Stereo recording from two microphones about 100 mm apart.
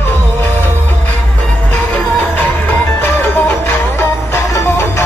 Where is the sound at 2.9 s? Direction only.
25° left (ahead or behind).